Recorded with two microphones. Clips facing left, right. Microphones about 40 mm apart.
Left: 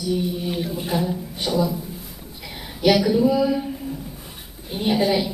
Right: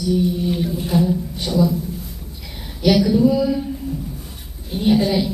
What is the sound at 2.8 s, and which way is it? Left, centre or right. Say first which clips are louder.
Speech: right 2 dB; centre.